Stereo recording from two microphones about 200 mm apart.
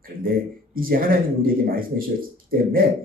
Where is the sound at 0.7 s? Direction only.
45° right (ahead or behind).